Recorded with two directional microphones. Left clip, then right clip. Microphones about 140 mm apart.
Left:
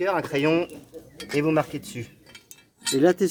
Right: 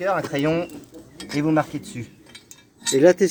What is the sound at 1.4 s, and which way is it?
Speech, 70° left (ahead or behind).